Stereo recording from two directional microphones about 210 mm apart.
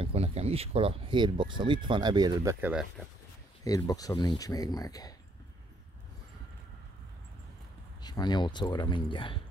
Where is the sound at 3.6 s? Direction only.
15° left (ahead or behind).